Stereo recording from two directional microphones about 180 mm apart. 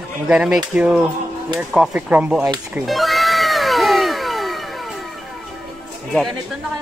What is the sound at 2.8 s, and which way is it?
Cat, centre (ahead or behind).